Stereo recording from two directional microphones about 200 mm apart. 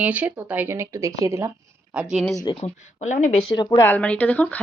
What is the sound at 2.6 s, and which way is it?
Speech, 35° left (ahead or behind).